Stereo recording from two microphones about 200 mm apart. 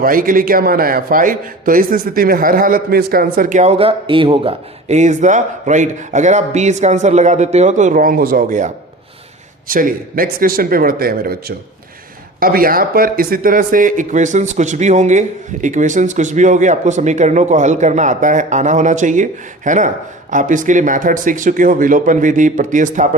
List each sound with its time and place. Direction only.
0.0 s a man's voice: 45° right (ahead or behind)